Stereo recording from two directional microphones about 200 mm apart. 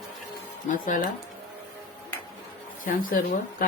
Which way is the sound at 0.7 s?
40° left (ahead or behind).